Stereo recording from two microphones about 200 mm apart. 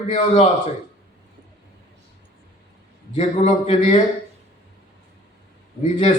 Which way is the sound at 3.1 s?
35° left (ahead or behind).